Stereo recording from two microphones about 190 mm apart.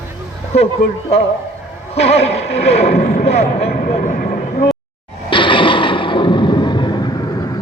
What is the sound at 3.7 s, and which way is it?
Speech, 50° left (ahead or behind).